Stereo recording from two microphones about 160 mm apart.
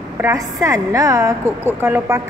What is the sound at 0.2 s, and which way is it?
A woman's voice, 20° right (ahead or behind).